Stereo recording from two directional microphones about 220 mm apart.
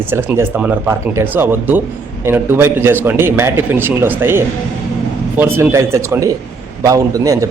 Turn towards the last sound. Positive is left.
turn(degrees=-15)  # may be behind; listen again after turning